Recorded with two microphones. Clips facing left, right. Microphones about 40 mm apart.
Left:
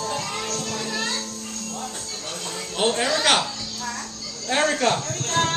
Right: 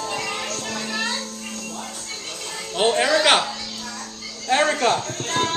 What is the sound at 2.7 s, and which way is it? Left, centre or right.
Speech, right.